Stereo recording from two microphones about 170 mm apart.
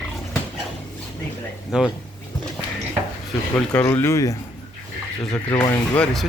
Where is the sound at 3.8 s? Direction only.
15° left (ahead or behind).